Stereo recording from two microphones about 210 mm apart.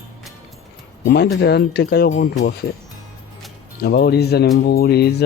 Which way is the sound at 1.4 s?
50° left (ahead or behind).